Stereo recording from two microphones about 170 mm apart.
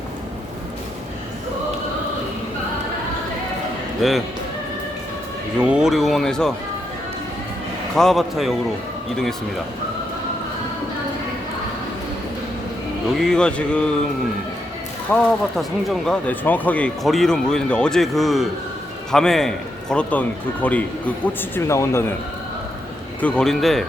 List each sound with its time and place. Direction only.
4.0 s speech: centre (ahead or behind)
5.5 s speech: 5° right (ahead or behind)
7.9 s speech: centre (ahead or behind)
13.1 s speech: 5° left (ahead or behind)
15.1 s speech: 5° left (ahead or behind)
23.2 s speech: 5° left (ahead or behind)